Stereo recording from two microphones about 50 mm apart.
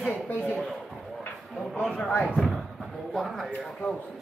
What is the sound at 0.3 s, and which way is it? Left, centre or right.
Speech, left.